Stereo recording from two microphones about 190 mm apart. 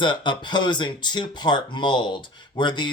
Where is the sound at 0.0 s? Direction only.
25° left (ahead or behind).